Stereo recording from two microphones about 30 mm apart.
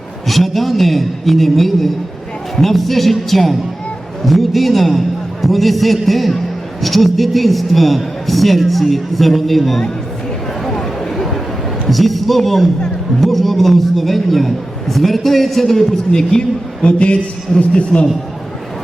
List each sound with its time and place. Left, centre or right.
0.3 s a man's voice: centre
10.7 s a sound: centre
11.9 s a man's voice: centre
16.1 s a woman's voice: left
17.0 s a man's voice: left